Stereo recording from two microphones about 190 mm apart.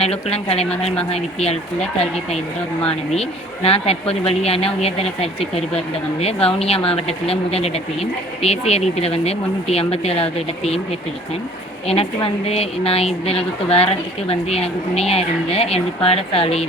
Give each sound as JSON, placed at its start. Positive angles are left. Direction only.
{"t": 0.0, "sound": "a woman's voice", "side_deg": 30}
{"t": 2.8, "sound": "a woman's voice", "side_deg": 30}
{"t": 11.9, "sound": "a woman's voice", "side_deg": 30}